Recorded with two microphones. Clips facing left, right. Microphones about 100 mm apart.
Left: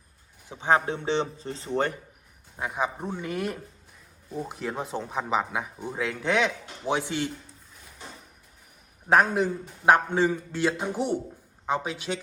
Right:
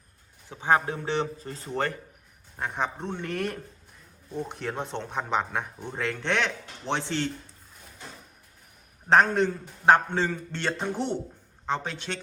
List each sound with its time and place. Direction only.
0.4 s speech: 20° left (ahead or behind)
2.6 s a man's voice: 5° left (ahead or behind)
9.0 s a man's voice: 10° left (ahead or behind)